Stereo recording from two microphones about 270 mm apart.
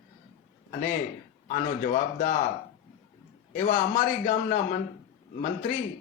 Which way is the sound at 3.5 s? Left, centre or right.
Left.